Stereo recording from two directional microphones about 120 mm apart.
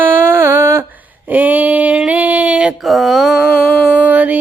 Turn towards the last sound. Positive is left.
turn(degrees=-10)  # may be behind; listen again after turning